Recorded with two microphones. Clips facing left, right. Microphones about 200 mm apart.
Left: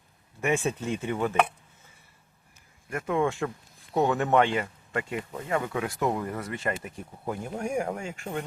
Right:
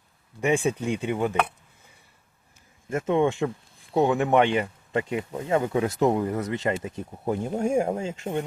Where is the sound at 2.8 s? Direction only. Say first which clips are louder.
Right 4 dB; 25° right (ahead or behind).